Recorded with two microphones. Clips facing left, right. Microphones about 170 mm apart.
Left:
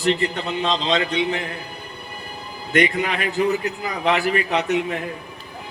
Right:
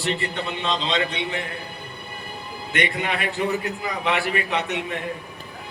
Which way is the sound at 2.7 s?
40° left (ahead or behind).